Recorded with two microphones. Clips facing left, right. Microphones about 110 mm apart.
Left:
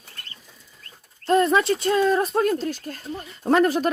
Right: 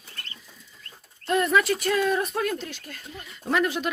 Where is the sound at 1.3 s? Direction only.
30° left (ahead or behind).